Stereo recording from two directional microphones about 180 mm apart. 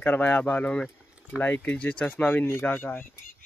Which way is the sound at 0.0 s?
10° left (ahead or behind).